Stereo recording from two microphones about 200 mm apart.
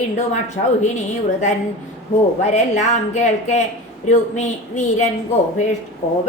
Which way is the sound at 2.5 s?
35° left (ahead or behind).